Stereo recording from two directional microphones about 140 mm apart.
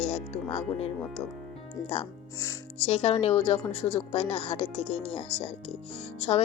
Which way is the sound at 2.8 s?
45° left (ahead or behind).